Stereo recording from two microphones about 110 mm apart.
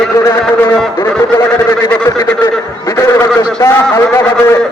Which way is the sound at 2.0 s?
30° left (ahead or behind).